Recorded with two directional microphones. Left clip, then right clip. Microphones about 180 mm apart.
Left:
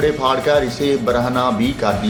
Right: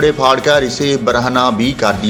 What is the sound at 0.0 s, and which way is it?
Speech, 35° right (ahead or behind).